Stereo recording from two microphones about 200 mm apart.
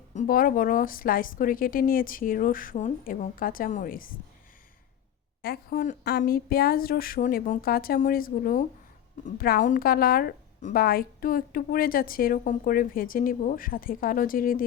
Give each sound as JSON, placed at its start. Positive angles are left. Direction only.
{"t": 0.1, "sound": "a woman's voice", "side_deg": 40}
{"t": 5.4, "sound": "a woman's voice", "side_deg": 50}